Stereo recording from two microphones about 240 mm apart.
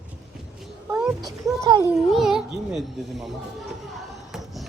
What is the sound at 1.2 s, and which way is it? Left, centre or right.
Speech, centre.